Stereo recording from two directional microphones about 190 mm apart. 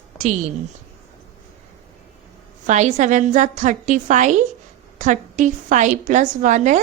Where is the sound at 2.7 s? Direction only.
40° right (ahead or behind).